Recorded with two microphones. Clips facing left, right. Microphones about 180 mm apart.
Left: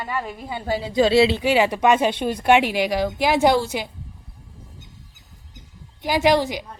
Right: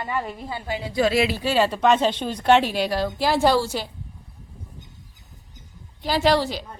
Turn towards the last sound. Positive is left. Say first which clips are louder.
# left 2 dB
turn(degrees=15)  # may be behind; listen again after turning